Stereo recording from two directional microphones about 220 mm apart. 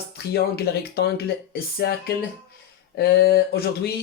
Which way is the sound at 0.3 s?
45° left (ahead or behind).